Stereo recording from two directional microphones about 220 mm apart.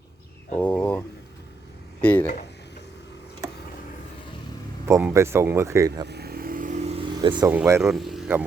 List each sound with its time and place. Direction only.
0.5 s a sound: 10° left (ahead or behind)
2.0 s speech: 5° left (ahead or behind)
4.9 s speech: 15° right (ahead or behind)
6.1 s vehicle: 45° right (ahead or behind); by 7.5 s 20° right (ahead or behind)
7.5 s speech: 10° right (ahead or behind)